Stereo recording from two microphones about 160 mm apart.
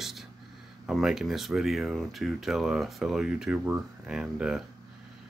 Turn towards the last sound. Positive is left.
turn(degrees=-5)  # may be behind; listen again after turning